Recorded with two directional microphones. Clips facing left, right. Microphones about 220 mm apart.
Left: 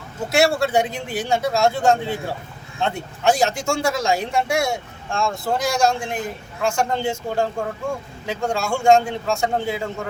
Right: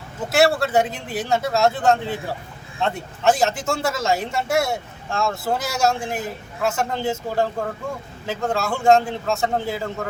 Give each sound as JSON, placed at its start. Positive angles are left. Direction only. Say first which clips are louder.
{"t": 0.3, "sound": "speech", "louder": "even", "side_deg": 0}